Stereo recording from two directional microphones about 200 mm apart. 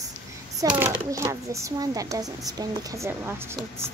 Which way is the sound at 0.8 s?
15° right (ahead or behind).